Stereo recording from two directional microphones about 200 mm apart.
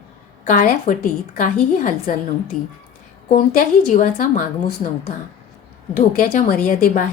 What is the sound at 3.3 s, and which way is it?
A woman's voice, 40° left (ahead or behind).